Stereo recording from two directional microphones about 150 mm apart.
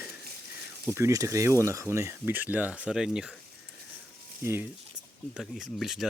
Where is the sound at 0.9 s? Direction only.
20° right (ahead or behind).